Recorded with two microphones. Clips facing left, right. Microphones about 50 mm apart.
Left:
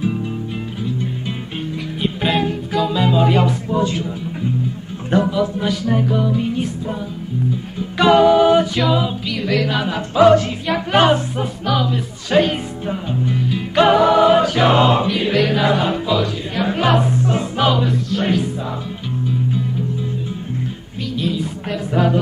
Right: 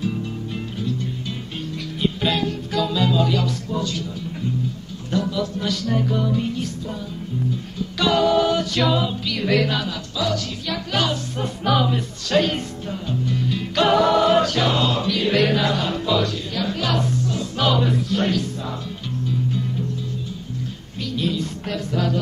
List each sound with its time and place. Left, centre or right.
2.2 s music: left
8.0 s music: left
9.8 s music: left
11.6 s music: centre
12.3 s music: centre
14.6 s music: left
15.3 s music: centre
15.6 s music: left
17.8 s music: centre
18.2 s music: centre
21.2 s a sound: centre
21.9 s music: left